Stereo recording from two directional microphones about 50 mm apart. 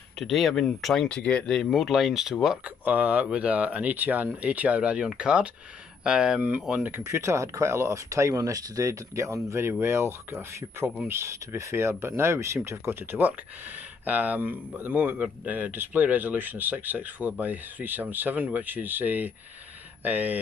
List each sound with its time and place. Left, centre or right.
0.2 s speech: centre
1.0 s speech: left
1.4 s speech: centre
1.7 s speech: centre
2.8 s speech: right
7.0 s speech: right
13.0 s speech: right